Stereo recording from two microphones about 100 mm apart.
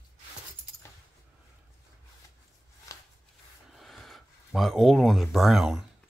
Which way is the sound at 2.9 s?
35° left (ahead or behind).